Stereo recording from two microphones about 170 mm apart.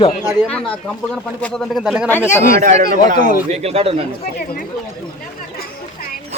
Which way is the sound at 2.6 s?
55° right (ahead or behind).